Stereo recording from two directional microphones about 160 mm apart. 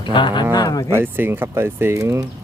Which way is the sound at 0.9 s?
15° right (ahead or behind).